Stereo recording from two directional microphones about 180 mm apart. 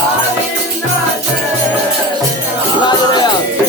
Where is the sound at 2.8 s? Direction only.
25° left (ahead or behind).